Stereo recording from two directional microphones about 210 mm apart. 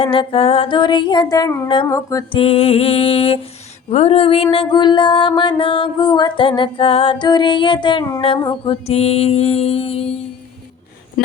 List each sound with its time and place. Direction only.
0.0 s music: 25° left (ahead or behind)
2.4 s music: 30° left (ahead or behind)